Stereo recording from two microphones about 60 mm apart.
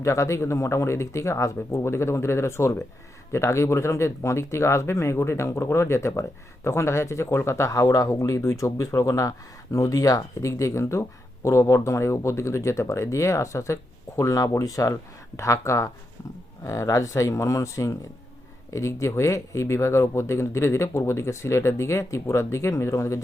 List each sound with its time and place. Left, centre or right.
0.0 s speech: left
15.4 s speech: left